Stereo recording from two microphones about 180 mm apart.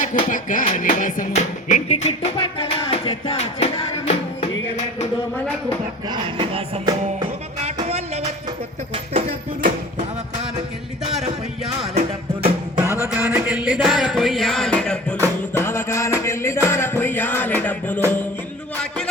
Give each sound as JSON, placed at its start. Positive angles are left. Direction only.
{"t": 0.3, "sound": "music", "side_deg": 45}
{"t": 6.1, "sound": "music", "side_deg": -30}
{"t": 11.1, "sound": "music", "side_deg": 0}
{"t": 11.9, "sound": "music", "side_deg": -40}
{"t": 12.8, "sound": "music", "side_deg": -15}